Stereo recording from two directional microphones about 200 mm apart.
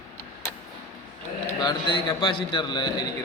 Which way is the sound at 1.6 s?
25° left (ahead or behind).